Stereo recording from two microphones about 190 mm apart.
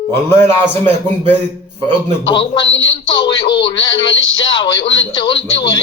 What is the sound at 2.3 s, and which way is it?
Speech, 25° left (ahead or behind).